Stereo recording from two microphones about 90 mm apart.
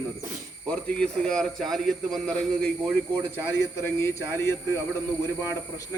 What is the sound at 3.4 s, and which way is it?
A man's voice, 30° left (ahead or behind).